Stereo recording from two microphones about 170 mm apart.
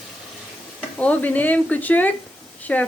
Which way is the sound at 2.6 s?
10° left (ahead or behind).